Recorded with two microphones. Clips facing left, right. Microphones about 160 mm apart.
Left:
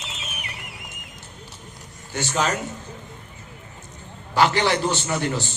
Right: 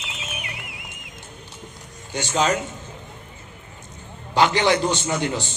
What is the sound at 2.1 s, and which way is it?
Speech, 20° right (ahead or behind).